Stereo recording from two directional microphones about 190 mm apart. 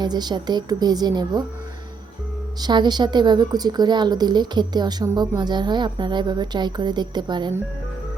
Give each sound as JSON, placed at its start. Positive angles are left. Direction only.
{"t": 0.0, "sound": "speech", "side_deg": -20}
{"t": 2.6, "sound": "speech", "side_deg": -20}